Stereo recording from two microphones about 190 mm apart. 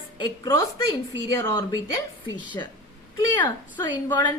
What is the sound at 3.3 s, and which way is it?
Speech, 20° left (ahead or behind).